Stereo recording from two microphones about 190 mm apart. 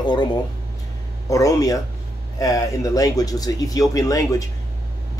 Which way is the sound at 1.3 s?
15° left (ahead or behind).